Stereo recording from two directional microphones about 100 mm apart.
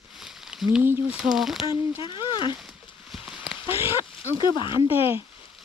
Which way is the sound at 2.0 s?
55° left (ahead or behind).